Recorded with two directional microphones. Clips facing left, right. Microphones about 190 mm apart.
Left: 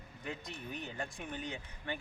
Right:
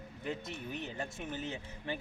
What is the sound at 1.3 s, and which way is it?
Speech, 25° right (ahead or behind).